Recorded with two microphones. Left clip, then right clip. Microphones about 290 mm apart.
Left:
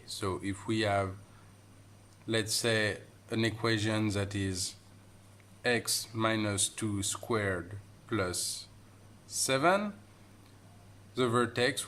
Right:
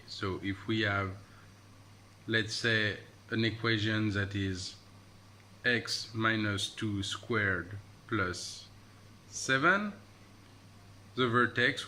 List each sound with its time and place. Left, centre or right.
0.2 s speech: centre
2.2 s speech: centre
11.1 s speech: centre